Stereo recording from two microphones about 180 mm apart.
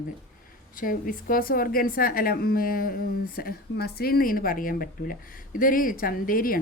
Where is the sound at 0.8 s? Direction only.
50° left (ahead or behind).